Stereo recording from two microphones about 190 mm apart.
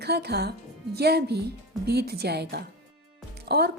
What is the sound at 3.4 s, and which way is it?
Music, 55° right (ahead or behind).